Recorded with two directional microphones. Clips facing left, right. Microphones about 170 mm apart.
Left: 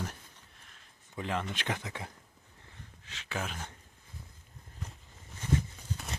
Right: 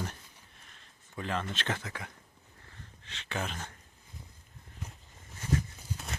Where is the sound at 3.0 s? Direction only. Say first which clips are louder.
Right 1 dB; 5° left (ahead or behind).